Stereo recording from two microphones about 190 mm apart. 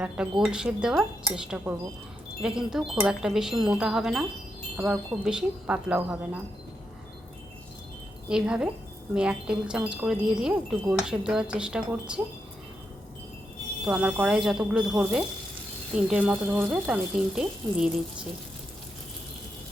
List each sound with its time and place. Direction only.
0.0 s wind chime: 5° right (ahead or behind)
8.3 s wind chime: 5° right (ahead or behind)
13.8 s wind chime: 5° right (ahead or behind)